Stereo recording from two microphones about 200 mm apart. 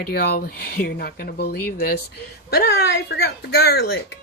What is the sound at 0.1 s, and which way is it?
Speech, 50° left (ahead or behind).